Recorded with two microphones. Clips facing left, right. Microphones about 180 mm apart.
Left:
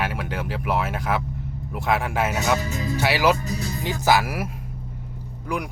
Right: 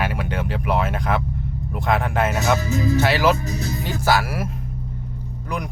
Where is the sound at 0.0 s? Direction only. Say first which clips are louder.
Right 3 dB; centre (ahead or behind).